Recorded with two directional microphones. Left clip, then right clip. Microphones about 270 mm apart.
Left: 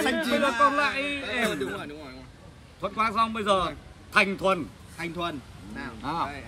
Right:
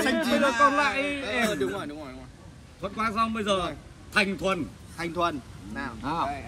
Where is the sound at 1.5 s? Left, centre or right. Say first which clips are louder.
Right 2 dB; centre.